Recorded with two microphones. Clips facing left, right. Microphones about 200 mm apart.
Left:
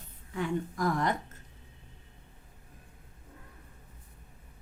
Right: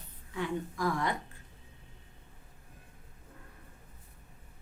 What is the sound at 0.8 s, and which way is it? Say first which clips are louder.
Speech: left 2 dB; 45° left (ahead or behind).